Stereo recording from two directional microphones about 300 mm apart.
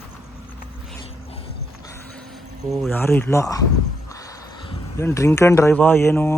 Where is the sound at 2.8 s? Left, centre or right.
Centre.